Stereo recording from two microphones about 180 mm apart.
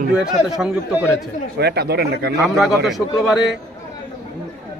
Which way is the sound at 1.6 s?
65° right (ahead or behind).